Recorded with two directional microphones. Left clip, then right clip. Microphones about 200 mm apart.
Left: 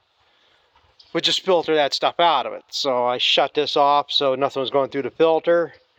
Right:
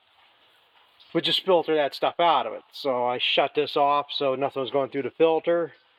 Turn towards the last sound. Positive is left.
turn(degrees=20)  # may be behind; listen again after turning